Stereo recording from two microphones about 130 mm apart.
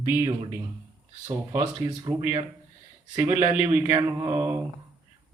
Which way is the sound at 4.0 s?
30° right (ahead or behind).